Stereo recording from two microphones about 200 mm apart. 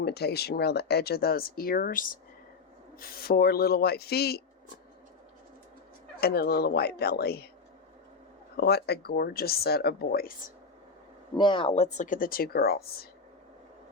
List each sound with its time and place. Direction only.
0.0 s speech: 55° left (ahead or behind)
6.1 s speech: 50° left (ahead or behind)
8.5 s speech: 55° left (ahead or behind)
11.3 s speech: 25° left (ahead or behind); by 13.1 s 50° left (ahead or behind)